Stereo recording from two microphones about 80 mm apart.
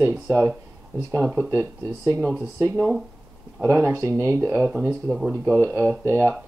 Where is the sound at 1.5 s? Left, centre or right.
Right.